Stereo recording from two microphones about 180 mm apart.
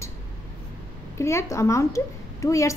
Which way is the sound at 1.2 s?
15° left (ahead or behind).